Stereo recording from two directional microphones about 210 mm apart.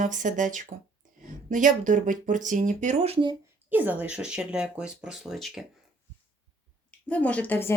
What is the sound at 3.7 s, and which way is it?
Speech, 10° right (ahead or behind).